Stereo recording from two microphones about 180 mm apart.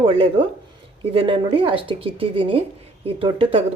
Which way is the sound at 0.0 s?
30° right (ahead or behind).